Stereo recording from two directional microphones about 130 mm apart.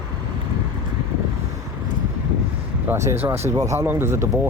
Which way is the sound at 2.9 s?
20° right (ahead or behind).